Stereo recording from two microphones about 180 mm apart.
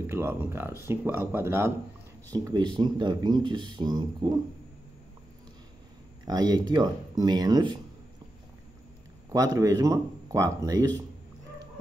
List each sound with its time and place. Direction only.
0.0 s speech: 15° right (ahead or behind)
6.2 s speech: 20° right (ahead or behind)
9.3 s speech: 20° right (ahead or behind)